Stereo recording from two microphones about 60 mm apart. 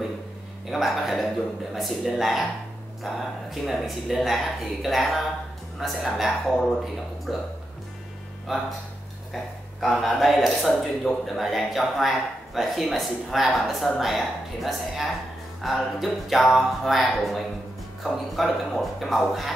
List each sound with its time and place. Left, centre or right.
0.7 s speech: centre
9.3 s speech: centre